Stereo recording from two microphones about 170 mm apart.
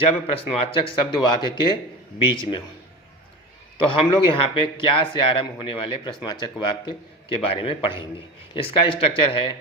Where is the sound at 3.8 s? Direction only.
30° left (ahead or behind).